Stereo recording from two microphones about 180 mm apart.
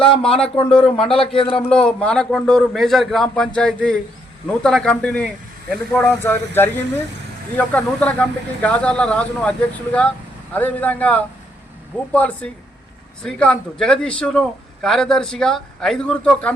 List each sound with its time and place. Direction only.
0.4 s speech: 30° left (ahead or behind)
1.7 s a man's voice: 5° left (ahead or behind)